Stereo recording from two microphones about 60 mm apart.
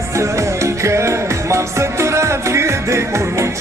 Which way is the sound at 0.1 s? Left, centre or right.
Right.